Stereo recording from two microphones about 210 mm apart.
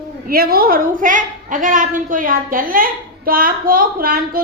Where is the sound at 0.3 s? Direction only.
45° right (ahead or behind).